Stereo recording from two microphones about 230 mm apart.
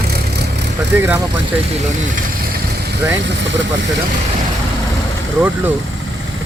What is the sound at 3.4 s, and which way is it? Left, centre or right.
Speech, right.